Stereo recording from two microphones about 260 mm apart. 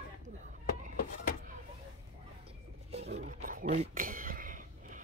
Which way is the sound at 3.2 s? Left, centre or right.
Right.